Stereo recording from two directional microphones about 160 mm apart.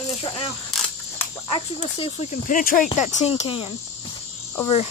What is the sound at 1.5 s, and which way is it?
Speech, 35° left (ahead or behind).